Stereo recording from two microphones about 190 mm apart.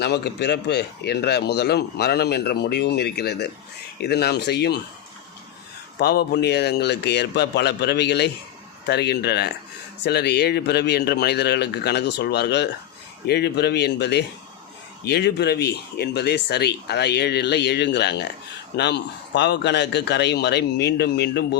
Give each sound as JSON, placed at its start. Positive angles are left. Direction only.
{"t": 0.0, "sound": "a man's voice", "side_deg": 60}
{"t": 6.0, "sound": "a man's voice", "side_deg": 60}